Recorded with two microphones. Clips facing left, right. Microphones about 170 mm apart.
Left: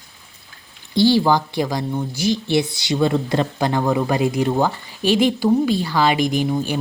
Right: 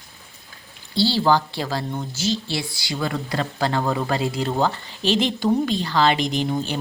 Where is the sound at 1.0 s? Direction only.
15° left (ahead or behind).